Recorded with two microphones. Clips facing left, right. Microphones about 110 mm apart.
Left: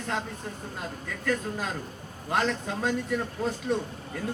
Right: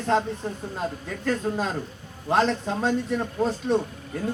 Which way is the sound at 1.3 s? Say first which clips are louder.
Right 4 dB; 30° right (ahead or behind).